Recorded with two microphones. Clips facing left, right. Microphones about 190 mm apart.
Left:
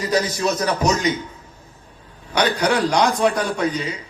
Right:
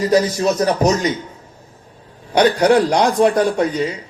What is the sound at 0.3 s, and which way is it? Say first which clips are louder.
Speech: right 5 dB; 50° right (ahead or behind).